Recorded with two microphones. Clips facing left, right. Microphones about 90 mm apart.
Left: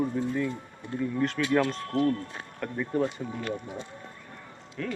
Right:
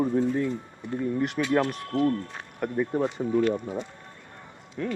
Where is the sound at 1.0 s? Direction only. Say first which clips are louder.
Right 1 dB; 15° right (ahead or behind).